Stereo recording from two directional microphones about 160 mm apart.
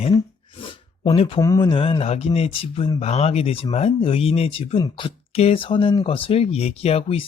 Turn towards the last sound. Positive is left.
turn(degrees=35)  # may be behind; listen again after turning